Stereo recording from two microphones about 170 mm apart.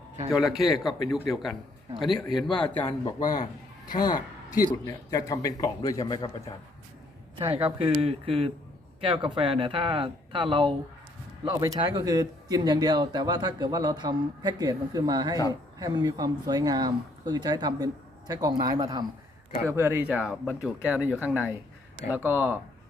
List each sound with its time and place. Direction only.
0.3 s a man's voice: centre (ahead or behind)
2.5 s a man's voice: 25° left (ahead or behind)
7.3 s speech: 30° right (ahead or behind); by 22.6 s 10° right (ahead or behind)